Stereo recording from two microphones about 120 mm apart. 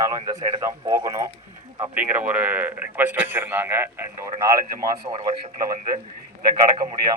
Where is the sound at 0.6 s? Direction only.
20° right (ahead or behind).